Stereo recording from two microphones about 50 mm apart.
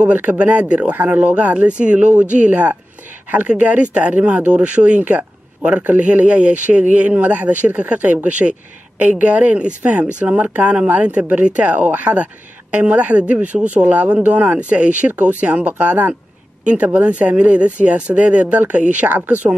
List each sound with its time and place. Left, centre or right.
0.0 s speech: right
5.0 s a sound: right
5.8 s speech: right